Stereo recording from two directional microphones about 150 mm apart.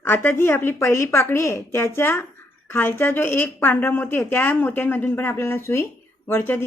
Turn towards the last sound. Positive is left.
turn(degrees=15)  # may be behind; listen again after turning